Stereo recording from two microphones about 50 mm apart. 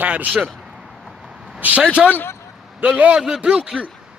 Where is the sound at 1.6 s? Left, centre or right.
Right.